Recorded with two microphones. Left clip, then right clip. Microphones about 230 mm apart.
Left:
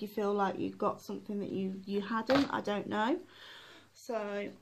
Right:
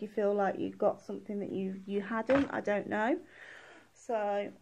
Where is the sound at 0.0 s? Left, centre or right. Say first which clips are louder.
Right 2 dB; centre.